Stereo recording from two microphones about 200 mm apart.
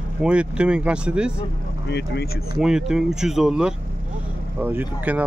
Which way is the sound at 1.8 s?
55° left (ahead or behind).